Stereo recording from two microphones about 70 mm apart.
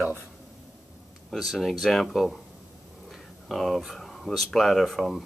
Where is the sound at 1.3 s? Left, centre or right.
Centre.